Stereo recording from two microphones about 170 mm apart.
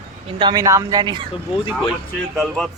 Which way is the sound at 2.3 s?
5° left (ahead or behind).